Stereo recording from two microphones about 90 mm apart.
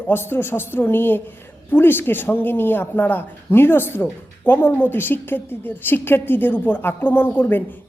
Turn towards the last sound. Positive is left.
turn(degrees=20)  # may be behind; listen again after turning